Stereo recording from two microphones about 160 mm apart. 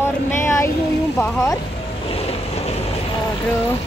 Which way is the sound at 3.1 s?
20° left (ahead or behind).